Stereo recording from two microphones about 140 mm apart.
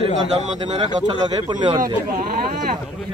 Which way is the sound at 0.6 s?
35° right (ahead or behind).